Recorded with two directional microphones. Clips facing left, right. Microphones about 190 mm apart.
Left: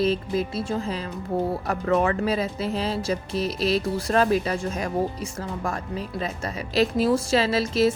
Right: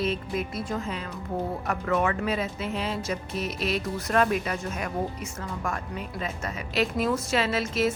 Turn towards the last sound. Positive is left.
turn(degrees=35)  # may be behind; listen again after turning